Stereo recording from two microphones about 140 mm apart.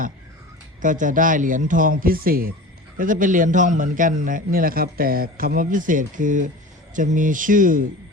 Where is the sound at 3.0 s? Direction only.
70° right (ahead or behind).